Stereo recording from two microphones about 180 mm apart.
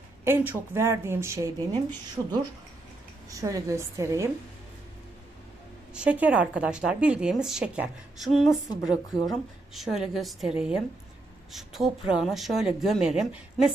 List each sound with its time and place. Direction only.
0.3 s speech: 10° right (ahead or behind)
5.9 s a woman's voice: 5° right (ahead or behind)